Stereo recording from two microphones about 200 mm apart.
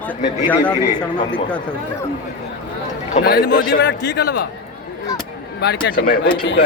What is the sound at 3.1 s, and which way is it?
Speech, 40° left (ahead or behind).